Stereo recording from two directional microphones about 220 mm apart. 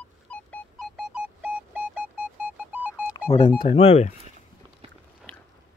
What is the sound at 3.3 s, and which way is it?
Music, 30° left (ahead or behind).